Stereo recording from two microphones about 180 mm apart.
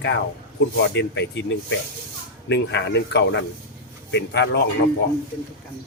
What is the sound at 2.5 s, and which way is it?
Speech, 75° left (ahead or behind).